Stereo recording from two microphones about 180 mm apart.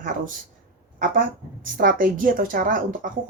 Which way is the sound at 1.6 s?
50° right (ahead or behind).